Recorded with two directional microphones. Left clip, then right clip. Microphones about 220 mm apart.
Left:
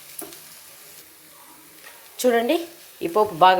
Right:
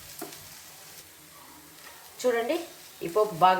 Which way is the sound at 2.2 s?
45° left (ahead or behind).